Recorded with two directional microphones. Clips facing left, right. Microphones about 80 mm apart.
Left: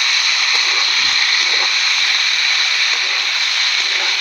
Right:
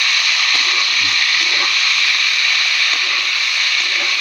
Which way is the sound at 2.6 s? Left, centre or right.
Left.